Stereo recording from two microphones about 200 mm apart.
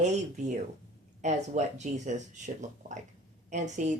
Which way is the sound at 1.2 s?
35° right (ahead or behind).